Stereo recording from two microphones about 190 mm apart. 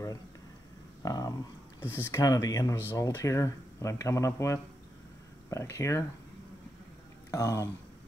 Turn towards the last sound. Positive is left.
turn(degrees=15)  # may be behind; listen again after turning